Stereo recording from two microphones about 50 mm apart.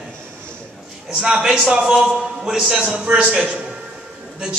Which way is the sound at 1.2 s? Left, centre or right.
Centre.